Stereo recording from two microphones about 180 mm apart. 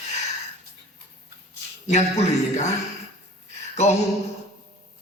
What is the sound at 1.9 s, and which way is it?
Speech, 40° left (ahead or behind).